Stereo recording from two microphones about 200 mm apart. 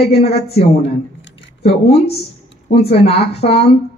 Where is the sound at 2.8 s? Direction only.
30° left (ahead or behind).